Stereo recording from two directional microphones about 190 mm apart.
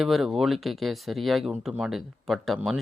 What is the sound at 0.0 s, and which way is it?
Speech, centre (ahead or behind).